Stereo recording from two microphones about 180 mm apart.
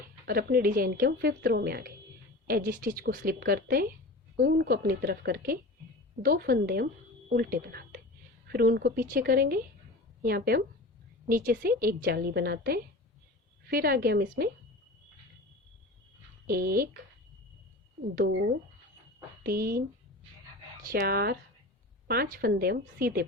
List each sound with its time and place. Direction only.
0.0 s speech: 55° right (ahead or behind)
16.5 s speech: 55° right (ahead or behind)
18.1 s speech: 60° right (ahead or behind)
19.4 s a woman's voice: 55° right (ahead or behind)
20.9 s speech: 55° right (ahead or behind)